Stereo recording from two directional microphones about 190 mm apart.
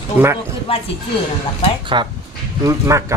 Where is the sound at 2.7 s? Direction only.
15° right (ahead or behind).